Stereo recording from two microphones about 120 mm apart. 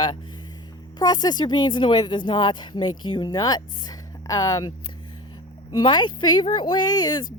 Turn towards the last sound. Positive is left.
turn(degrees=35)  # may be behind; listen again after turning